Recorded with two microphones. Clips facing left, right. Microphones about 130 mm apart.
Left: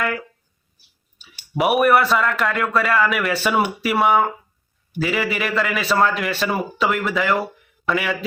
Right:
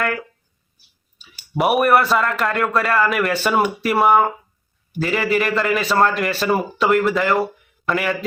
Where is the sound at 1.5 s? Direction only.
Centre (ahead or behind).